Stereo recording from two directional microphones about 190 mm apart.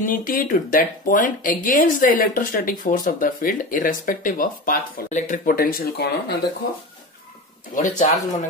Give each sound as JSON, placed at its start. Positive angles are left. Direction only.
{"t": 0.0, "sound": "speech", "side_deg": 45}
{"t": 7.7, "sound": "speech", "side_deg": 45}